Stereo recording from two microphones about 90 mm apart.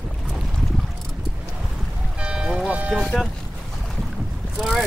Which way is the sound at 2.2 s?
10° right (ahead or behind).